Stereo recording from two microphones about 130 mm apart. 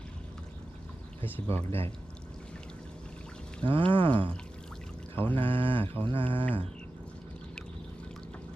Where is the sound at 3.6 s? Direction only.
40° right (ahead or behind).